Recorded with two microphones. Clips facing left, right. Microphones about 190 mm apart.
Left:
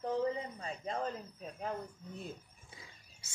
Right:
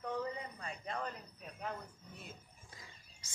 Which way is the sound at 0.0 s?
30° left (ahead or behind).